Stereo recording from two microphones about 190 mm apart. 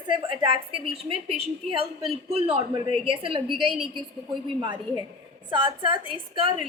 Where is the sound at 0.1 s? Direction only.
25° right (ahead or behind).